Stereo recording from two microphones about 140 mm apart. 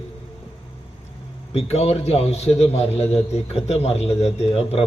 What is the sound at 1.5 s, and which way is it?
A man's voice, 50° left (ahead or behind).